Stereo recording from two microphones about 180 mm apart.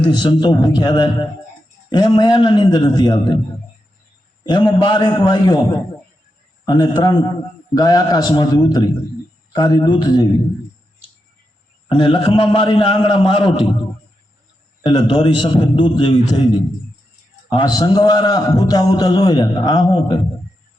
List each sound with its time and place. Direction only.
0.0 s a man's voice: 25° left (ahead or behind)
4.4 s a man's voice: 25° left (ahead or behind)
6.7 s a man's voice: 25° left (ahead or behind)
11.9 s a man's voice: 30° left (ahead or behind)
14.8 s a man's voice: 30° left (ahead or behind)